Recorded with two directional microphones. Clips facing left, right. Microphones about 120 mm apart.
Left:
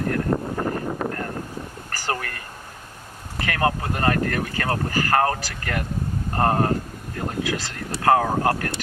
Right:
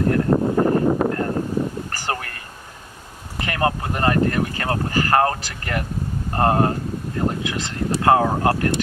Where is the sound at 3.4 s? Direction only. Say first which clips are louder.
Right 1 dB; 20° right (ahead or behind).